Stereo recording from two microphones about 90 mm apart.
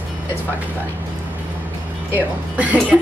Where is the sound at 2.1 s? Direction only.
15° right (ahead or behind).